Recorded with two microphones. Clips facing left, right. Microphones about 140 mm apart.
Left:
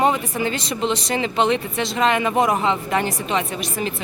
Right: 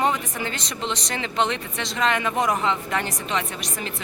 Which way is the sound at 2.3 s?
30° left (ahead or behind).